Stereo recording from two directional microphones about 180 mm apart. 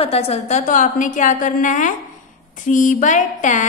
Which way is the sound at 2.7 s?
45° left (ahead or behind).